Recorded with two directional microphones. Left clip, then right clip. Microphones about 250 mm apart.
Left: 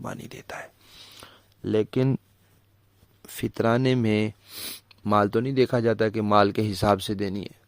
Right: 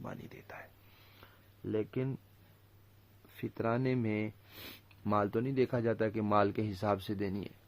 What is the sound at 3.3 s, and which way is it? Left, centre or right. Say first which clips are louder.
Speech: left 11 dB; left.